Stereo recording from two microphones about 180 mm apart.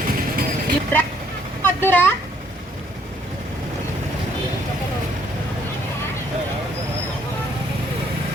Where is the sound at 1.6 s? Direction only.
10° left (ahead or behind).